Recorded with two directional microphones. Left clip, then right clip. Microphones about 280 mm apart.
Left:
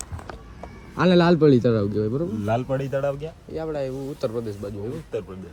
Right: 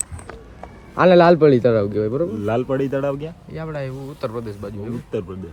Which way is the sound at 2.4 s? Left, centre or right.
Right.